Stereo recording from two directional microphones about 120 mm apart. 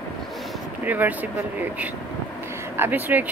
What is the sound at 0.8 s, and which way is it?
Speech, 15° right (ahead or behind).